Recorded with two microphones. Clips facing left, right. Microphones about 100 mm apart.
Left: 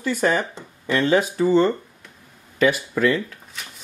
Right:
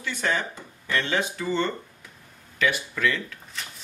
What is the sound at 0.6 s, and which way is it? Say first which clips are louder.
Speech: left 6 dB; 30° left (ahead or behind).